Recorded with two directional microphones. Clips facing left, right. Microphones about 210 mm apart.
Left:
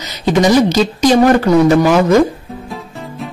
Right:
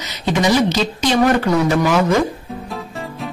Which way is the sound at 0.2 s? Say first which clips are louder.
Left 5 dB; 40° left (ahead or behind).